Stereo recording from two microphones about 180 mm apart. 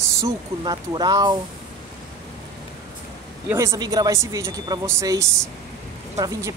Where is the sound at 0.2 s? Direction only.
20° right (ahead or behind).